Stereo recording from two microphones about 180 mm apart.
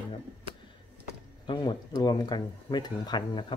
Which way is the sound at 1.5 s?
20° left (ahead or behind).